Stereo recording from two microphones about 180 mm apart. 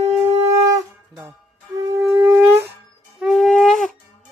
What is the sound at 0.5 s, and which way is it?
Wind instrument, 15° right (ahead or behind).